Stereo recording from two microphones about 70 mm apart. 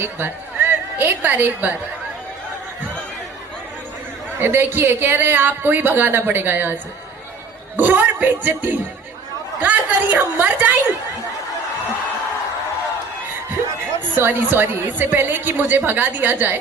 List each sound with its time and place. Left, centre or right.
0.0 s a woman's voice: right
4.4 s speech: right
7.8 s a woman's voice: right
14.2 s a woman's voice: right